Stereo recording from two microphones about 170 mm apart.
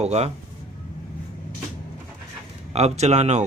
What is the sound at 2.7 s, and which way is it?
Speech, 40° right (ahead or behind).